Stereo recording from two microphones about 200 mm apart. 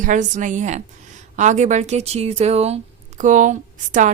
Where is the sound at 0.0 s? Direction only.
40° right (ahead or behind).